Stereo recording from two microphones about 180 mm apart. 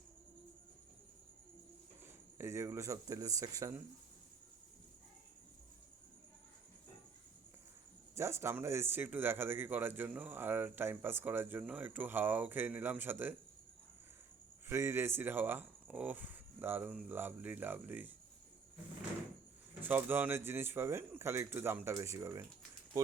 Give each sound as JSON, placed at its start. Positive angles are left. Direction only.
{"t": 2.4, "sound": "speech", "side_deg": -15}
{"t": 8.1, "sound": "speech", "side_deg": -15}
{"t": 14.7, "sound": "speech", "side_deg": -15}
{"t": 19.8, "sound": "speech", "side_deg": -10}